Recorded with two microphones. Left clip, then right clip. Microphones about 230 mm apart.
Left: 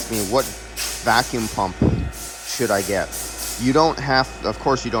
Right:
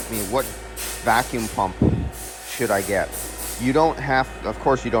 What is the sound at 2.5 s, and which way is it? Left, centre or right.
Speech, centre.